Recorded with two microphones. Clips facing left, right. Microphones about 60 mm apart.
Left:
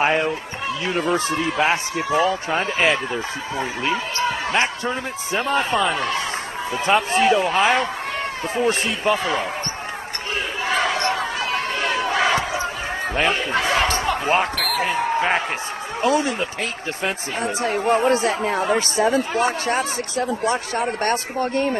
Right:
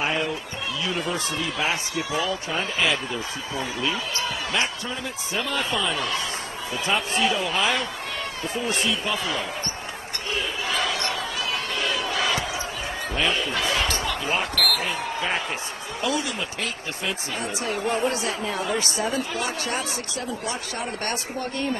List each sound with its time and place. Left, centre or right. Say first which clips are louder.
0.0 s speech: left 6 dB; left
10.7 s crowd: left 7 dB; left
13.1 s speech: left 4 dB; left